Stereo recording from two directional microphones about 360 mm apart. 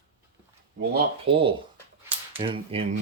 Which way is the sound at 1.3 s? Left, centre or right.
Centre.